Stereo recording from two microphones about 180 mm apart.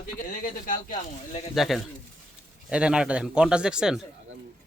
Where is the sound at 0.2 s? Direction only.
50° left (ahead or behind).